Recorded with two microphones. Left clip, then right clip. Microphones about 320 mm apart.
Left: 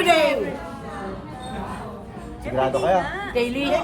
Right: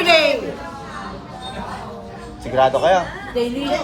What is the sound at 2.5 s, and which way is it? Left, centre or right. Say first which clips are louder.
Speech: right 5 dB; right.